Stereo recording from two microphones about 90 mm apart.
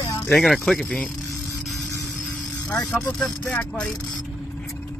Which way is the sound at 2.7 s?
15° left (ahead or behind).